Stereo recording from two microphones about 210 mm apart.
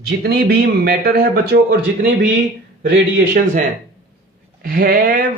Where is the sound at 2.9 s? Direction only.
45° right (ahead or behind).